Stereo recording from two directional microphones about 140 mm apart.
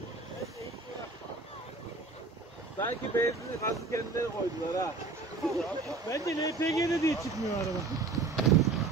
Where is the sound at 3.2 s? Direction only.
20° left (ahead or behind).